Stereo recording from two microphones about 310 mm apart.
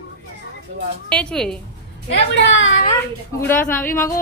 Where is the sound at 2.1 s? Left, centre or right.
Left.